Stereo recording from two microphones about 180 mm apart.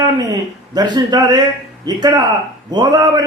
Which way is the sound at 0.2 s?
20° right (ahead or behind).